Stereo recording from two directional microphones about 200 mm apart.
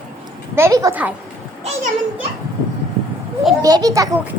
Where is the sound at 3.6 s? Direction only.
20° right (ahead or behind).